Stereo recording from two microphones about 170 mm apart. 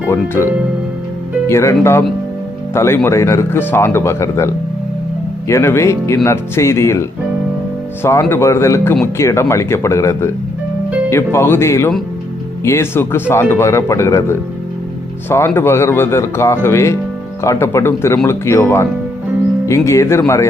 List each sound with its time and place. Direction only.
1.5 s speech: 15° left (ahead or behind)